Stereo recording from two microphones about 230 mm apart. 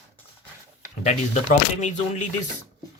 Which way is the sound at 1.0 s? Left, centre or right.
Left.